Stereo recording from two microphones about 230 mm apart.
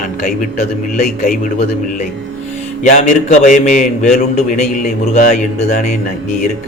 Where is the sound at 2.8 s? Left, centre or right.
Left.